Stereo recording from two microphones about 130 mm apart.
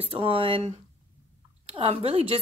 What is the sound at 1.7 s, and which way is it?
Speech, 45° right (ahead or behind).